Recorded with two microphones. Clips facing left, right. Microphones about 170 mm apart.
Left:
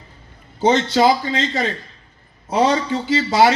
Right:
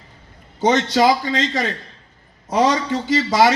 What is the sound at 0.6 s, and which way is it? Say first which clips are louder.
A man's voice: left 1 dB; 25° left (ahead or behind).